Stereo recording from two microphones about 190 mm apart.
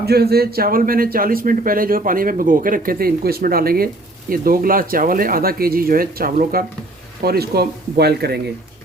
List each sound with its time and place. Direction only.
0.0 s speech: 55° right (ahead or behind)